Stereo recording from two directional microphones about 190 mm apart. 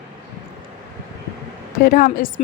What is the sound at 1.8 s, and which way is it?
Speech, 45° left (ahead or behind).